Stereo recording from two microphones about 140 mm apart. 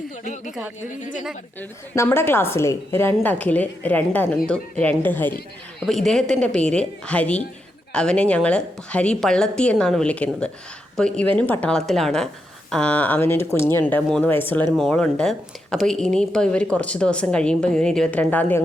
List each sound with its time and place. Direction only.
2.0 s speech: 15° left (ahead or behind)
5.8 s a woman's voice: centre (ahead or behind)